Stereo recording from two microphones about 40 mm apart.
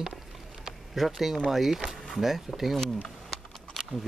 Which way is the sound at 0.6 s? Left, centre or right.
Centre.